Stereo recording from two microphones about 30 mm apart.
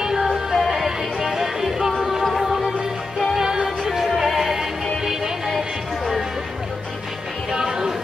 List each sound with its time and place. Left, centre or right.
0.5 s music: centre
3.9 s music: centre
7.5 s music: centre